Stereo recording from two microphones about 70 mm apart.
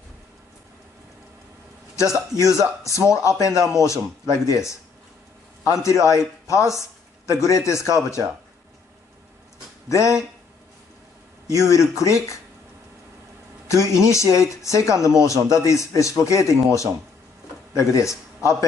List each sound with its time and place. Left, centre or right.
2.0 s speech: left
9.8 s speech: left
11.4 s speech: left
13.7 s speech: left